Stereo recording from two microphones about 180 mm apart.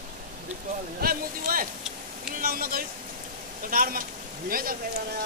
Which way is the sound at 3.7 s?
50° right (ahead or behind).